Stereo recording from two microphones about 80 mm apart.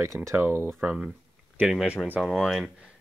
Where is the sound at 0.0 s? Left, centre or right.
Right.